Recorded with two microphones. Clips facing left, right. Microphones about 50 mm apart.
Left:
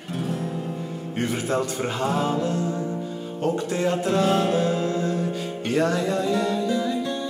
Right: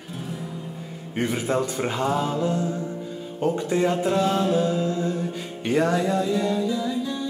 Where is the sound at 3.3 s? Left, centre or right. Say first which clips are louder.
Right 2 dB; centre.